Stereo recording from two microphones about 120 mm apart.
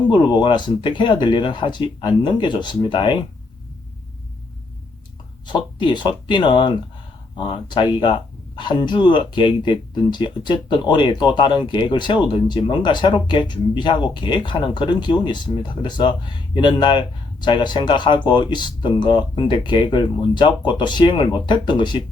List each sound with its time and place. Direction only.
0.1 s speech: 40° left (ahead or behind)
5.5 s speech: 40° left (ahead or behind)